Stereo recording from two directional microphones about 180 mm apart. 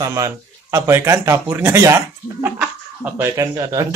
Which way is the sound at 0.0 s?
20° right (ahead or behind).